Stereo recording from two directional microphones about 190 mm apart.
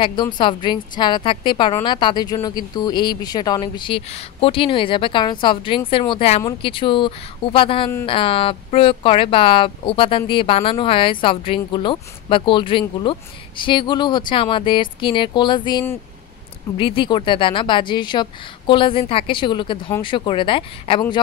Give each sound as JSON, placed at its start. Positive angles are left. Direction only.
{"t": 0.0, "sound": "speech", "side_deg": 25}